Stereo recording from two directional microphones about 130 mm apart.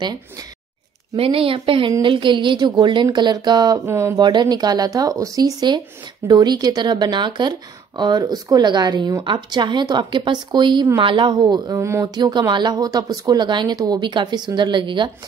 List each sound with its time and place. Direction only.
1.1 s a woman's voice: 45° right (ahead or behind); by 4.3 s 25° right (ahead or behind)
4.3 s speech: 35° right (ahead or behind)
12.2 s speech: 30° right (ahead or behind)